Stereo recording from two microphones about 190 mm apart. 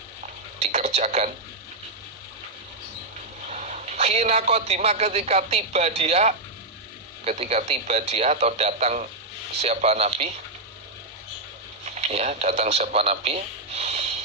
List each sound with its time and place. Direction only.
0.6 s a sound: 35° right (ahead or behind)
3.5 s a man's voice: 35° right (ahead or behind)
11.9 s speech: 35° right (ahead or behind)